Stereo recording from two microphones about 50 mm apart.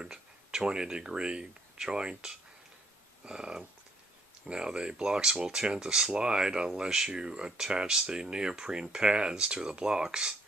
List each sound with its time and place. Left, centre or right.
0.0 s speech: centre